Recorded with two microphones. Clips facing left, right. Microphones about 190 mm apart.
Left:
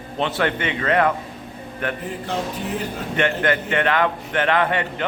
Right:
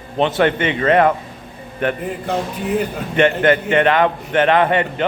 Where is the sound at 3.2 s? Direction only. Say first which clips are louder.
Right 7 dB; 20° right (ahead or behind).